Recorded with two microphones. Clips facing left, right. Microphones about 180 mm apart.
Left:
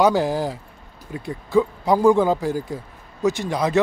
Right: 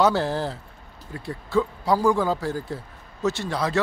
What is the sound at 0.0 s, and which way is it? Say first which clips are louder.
Speech: left 3 dB; 15° left (ahead or behind).